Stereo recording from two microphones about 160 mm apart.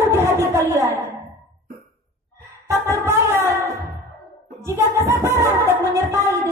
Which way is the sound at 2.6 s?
15° right (ahead or behind).